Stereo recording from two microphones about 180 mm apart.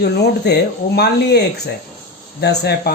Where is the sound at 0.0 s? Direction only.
65° left (ahead or behind).